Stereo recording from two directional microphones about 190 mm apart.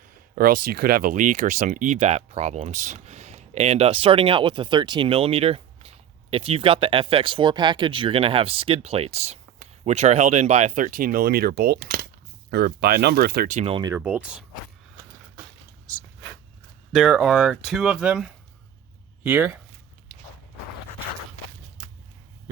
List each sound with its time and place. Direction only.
0.3 s speech: 50° right (ahead or behind)
13.6 s speech: 30° right (ahead or behind)
13.9 s speech: 10° right (ahead or behind)
16.9 s speech: centre (ahead or behind)